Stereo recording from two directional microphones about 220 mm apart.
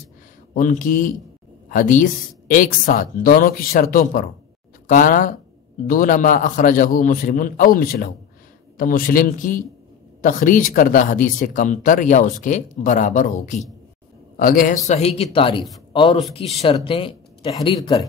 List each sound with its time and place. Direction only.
0.6 s a man's voice: 35° left (ahead or behind)
14.9 s speech: 30° left (ahead or behind)